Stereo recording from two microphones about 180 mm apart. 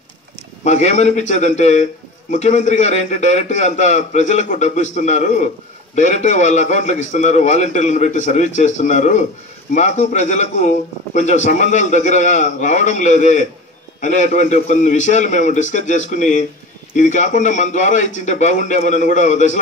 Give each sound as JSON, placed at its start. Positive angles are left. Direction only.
{"t": 0.7, "sound": "a man's voice", "side_deg": 40}